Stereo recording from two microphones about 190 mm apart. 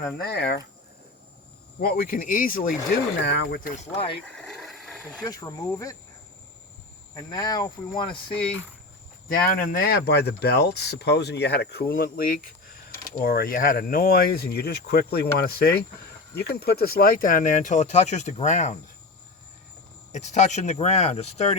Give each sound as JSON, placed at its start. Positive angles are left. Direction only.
{"t": 0.2, "sound": "speech", "side_deg": 60}
{"t": 1.8, "sound": "speech", "side_deg": 50}
{"t": 3.2, "sound": "speech", "side_deg": 60}
{"t": 4.4, "sound": "a sound", "side_deg": 0}
{"t": 5.2, "sound": "speech", "side_deg": 20}
{"t": 7.2, "sound": "speech", "side_deg": 20}
{"t": 9.3, "sound": "speech", "side_deg": 50}
{"t": 20.1, "sound": "speech", "side_deg": 40}